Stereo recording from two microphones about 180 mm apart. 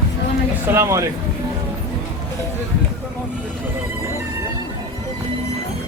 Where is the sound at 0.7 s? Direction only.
15° right (ahead or behind).